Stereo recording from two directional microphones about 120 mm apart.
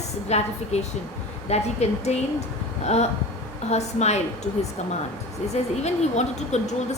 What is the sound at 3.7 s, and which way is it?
A woman's voice, 70° left (ahead or behind).